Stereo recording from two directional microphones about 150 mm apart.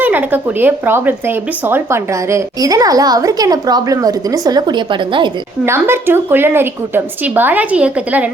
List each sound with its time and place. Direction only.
0.0 s speech: 10° right (ahead or behind); by 5.3 s 30° right (ahead or behind)
5.6 s a woman's voice: 15° right (ahead or behind)